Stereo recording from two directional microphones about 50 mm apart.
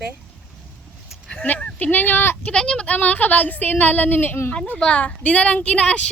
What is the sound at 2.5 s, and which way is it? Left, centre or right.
Speech, centre.